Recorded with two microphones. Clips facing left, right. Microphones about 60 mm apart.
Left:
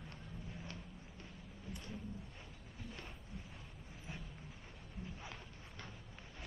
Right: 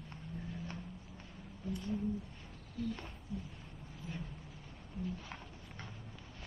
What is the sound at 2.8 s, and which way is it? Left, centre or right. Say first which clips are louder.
Speech: right 14 dB; left.